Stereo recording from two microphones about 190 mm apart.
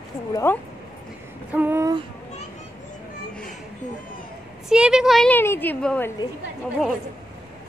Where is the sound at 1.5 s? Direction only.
10° right (ahead or behind).